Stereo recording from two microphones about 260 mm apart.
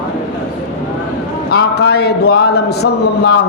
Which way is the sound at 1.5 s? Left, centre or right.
Left.